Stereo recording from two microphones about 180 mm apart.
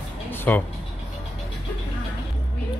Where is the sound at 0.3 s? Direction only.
10° left (ahead or behind).